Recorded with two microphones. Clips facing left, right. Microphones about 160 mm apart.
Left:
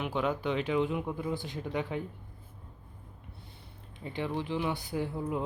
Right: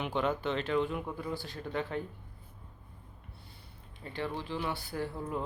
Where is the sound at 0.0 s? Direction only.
5° left (ahead or behind).